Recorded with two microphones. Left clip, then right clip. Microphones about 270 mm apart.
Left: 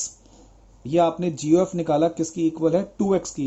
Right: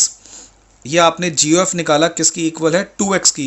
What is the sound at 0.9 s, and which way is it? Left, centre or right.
Speech, right.